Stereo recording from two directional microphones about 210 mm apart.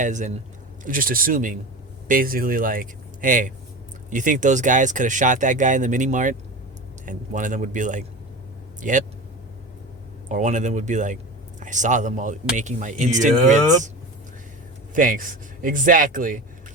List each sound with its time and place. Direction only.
0.0 s speech: 35° right (ahead or behind)
10.2 s speech: 35° right (ahead or behind)
14.9 s speech: 40° right (ahead or behind)